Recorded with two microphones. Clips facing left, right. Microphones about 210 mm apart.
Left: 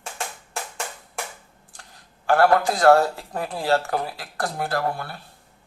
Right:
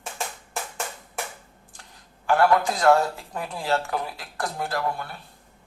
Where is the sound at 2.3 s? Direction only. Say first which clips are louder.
Left 2 dB; 35° left (ahead or behind).